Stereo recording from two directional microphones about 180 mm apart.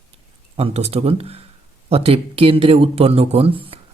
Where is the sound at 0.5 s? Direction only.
35° right (ahead or behind).